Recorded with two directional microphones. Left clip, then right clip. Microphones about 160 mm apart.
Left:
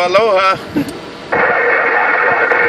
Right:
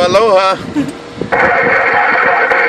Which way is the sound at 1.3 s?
50° right (ahead or behind).